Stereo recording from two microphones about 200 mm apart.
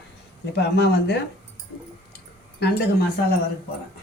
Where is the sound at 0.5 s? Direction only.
60° left (ahead or behind).